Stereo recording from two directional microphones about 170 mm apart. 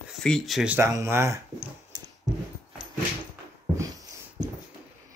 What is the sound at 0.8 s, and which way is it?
Speech, 15° right (ahead or behind).